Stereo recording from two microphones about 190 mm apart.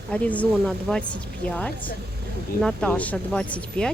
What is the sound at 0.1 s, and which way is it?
Speech, 5° left (ahead or behind).